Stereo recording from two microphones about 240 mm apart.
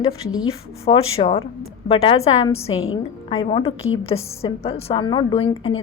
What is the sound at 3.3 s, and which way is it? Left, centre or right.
Speech, left.